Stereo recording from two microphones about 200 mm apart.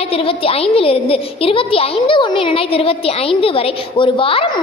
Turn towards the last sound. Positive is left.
turn(degrees=25)  # may be behind; listen again after turning